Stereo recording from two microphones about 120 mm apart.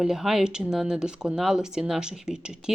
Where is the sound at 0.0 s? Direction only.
5° right (ahead or behind).